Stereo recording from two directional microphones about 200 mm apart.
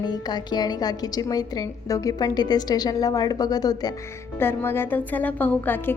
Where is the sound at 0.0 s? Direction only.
20° left (ahead or behind).